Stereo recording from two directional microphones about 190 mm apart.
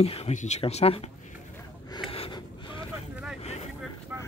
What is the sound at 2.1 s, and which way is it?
Gasp, 30° left (ahead or behind).